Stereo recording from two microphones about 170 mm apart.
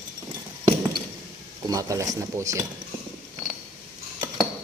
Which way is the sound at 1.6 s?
20° right (ahead or behind).